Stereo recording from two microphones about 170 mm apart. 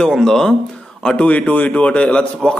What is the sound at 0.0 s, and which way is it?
A man's voice, centre (ahead or behind).